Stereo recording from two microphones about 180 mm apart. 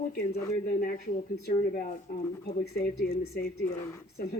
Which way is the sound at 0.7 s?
50° left (ahead or behind).